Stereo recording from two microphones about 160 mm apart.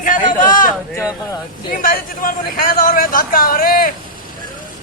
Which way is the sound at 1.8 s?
60° left (ahead or behind).